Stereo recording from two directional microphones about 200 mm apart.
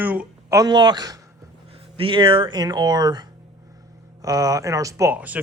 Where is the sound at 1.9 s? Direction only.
25° right (ahead or behind).